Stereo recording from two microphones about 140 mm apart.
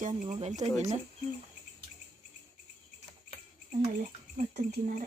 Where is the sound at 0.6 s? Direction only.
55° right (ahead or behind).